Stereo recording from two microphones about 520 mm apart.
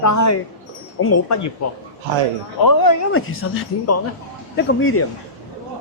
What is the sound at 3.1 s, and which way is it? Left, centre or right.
Speech, left.